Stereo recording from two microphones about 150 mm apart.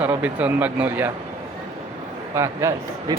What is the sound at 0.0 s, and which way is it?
Speech, 10° right (ahead or behind).